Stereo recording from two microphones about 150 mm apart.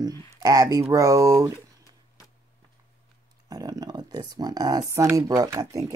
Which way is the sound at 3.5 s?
25° right (ahead or behind).